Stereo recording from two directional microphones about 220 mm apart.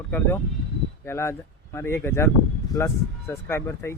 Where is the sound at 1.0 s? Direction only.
10° left (ahead or behind).